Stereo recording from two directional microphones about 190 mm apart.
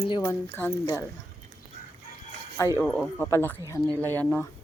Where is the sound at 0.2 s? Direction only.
10° left (ahead or behind).